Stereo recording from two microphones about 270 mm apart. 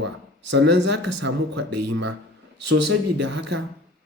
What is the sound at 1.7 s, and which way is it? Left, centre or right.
Speech, right.